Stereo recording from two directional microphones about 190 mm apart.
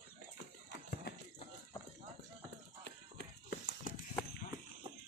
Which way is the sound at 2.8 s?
60° left (ahead or behind).